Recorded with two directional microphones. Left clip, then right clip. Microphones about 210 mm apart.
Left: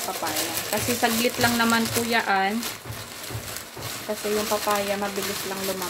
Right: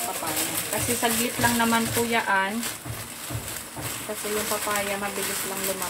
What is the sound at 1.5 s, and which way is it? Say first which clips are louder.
Speech: left 1 dB; 55° left (ahead or behind).